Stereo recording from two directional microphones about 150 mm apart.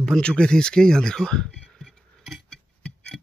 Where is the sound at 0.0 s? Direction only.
5° left (ahead or behind).